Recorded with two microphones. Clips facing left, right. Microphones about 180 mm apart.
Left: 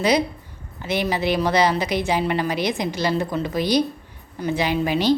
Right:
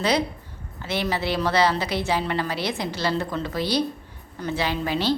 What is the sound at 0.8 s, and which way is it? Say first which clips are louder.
A woman's voice: left 3 dB; 15° left (ahead or behind).